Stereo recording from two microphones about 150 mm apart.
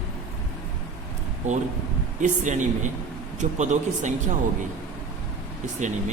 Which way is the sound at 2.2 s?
55° right (ahead or behind).